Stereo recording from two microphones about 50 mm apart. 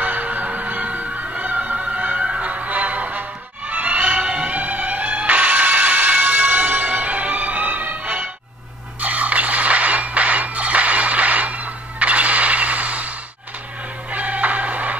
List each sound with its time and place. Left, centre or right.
0.0 s music: right
14.1 s music: right